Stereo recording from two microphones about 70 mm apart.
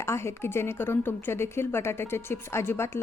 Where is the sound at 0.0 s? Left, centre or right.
Left.